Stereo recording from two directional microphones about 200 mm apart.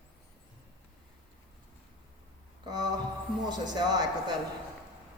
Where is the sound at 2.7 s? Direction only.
20° right (ahead or behind).